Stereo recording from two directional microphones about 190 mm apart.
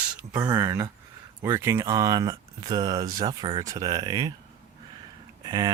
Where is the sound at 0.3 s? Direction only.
20° right (ahead or behind).